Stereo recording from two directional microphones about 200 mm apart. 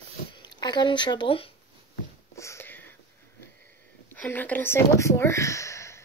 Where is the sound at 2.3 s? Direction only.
15° left (ahead or behind).